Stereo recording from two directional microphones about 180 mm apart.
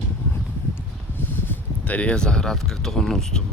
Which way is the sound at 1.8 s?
10° left (ahead or behind).